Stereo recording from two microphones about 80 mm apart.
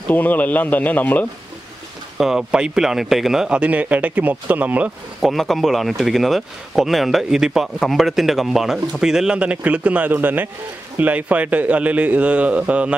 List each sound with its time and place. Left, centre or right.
0.1 s speech: left
2.1 s speech: centre
5.2 s speech: centre